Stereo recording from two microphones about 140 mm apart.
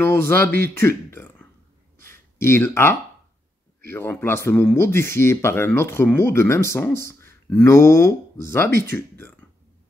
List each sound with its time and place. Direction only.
0.0 s speech: 15° left (ahead or behind)
2.0 s a sound: 20° left (ahead or behind)
3.9 s speech: 15° left (ahead or behind)